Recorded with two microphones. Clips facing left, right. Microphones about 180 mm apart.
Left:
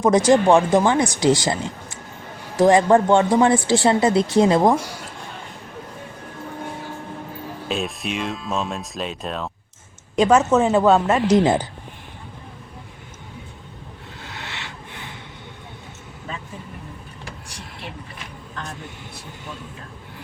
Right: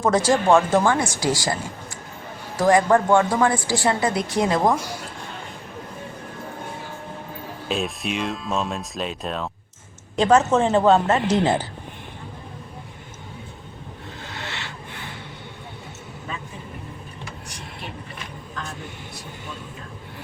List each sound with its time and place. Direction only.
0.0 s speech: 20° left (ahead or behind)
7.7 s a woman's voice: centre (ahead or behind)
14.3 s a sound: 10° left (ahead or behind)